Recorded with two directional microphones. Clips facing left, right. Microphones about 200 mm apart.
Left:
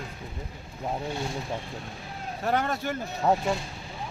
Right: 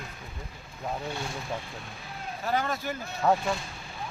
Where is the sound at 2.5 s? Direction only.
65° left (ahead or behind).